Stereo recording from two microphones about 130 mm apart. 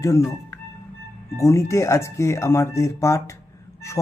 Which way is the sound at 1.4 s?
20° left (ahead or behind).